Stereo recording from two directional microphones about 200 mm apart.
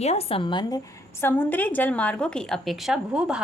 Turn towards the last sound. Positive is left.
turn(degrees=-5)  # may be behind; listen again after turning